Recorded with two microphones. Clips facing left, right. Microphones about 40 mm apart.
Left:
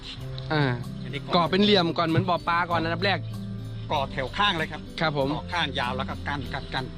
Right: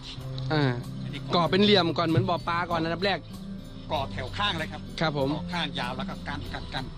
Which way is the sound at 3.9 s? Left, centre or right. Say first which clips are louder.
Left 3 dB; left.